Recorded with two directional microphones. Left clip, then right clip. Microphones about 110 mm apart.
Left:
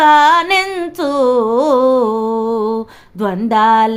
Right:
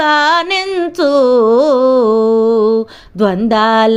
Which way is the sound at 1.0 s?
25° right (ahead or behind).